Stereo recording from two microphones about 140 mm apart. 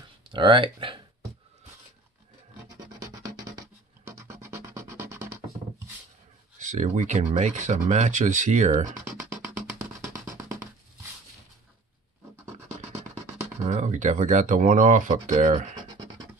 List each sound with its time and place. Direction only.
0.3 s speech: 35° right (ahead or behind)
3.0 s music: 25° right (ahead or behind)
6.6 s speech: 65° right (ahead or behind)
9.0 s music: 20° right (ahead or behind)
13.7 s speech: 55° right (ahead or behind)